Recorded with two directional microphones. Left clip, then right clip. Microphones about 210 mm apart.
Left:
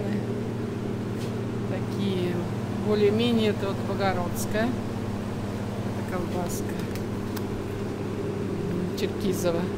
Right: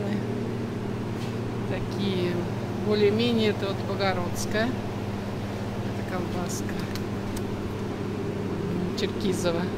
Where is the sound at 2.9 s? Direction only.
5° left (ahead or behind).